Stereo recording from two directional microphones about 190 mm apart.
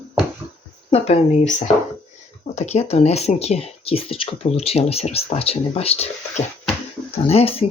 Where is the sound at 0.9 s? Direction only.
35° left (ahead or behind).